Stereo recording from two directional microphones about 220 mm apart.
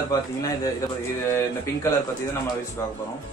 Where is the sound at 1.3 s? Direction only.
10° left (ahead or behind).